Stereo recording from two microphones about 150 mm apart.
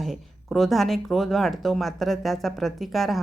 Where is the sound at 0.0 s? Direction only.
Centre (ahead or behind).